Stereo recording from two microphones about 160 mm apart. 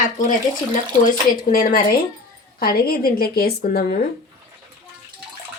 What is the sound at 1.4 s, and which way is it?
Speech, 60° left (ahead or behind).